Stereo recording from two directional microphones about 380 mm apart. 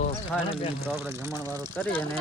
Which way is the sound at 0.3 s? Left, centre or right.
Centre.